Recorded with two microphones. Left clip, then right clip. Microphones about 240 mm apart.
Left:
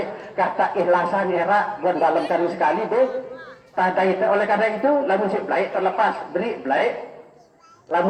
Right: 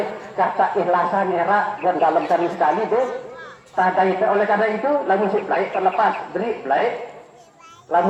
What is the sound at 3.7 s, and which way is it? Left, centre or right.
A man's voice, left.